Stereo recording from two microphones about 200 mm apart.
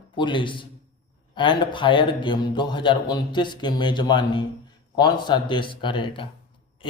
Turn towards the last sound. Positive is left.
turn(degrees=25)  # may be behind; listen again after turning